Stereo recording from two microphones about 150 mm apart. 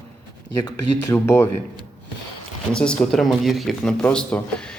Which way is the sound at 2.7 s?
5° left (ahead or behind).